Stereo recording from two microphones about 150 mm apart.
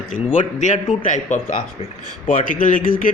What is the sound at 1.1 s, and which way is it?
Speech, 55° left (ahead or behind).